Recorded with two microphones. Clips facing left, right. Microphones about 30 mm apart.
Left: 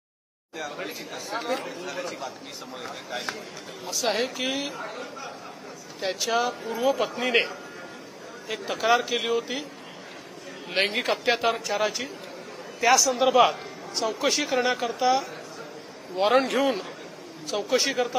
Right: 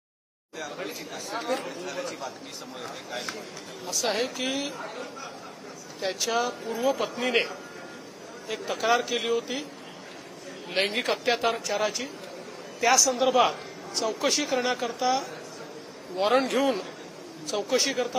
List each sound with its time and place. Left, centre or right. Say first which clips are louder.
0.6 s speech: left 1 dB; centre
10.7 s speech: left 2 dB; centre